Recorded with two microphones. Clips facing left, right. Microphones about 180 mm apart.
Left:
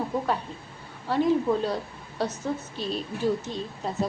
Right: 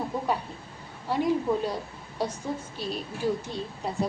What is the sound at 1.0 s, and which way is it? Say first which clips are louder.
A woman's voice: left 3 dB; 10° right (ahead or behind).